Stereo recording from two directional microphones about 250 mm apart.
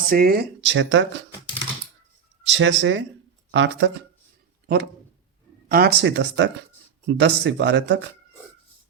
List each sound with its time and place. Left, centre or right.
0.1 s speech: right
2.5 s speech: right
5.6 s speech: right